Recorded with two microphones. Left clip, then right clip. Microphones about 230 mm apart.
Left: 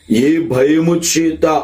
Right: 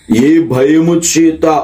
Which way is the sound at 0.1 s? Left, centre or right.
Centre.